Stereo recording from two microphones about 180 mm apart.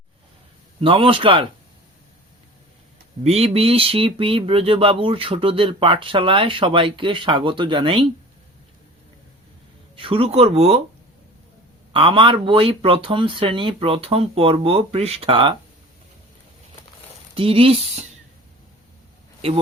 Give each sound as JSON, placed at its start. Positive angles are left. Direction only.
{"t": 0.8, "sound": "speech", "side_deg": -30}
{"t": 3.2, "sound": "speech", "side_deg": -35}
{"t": 9.9, "sound": "speech", "side_deg": -30}
{"t": 11.9, "sound": "speech", "side_deg": -30}
{"t": 17.3, "sound": "speech", "side_deg": -30}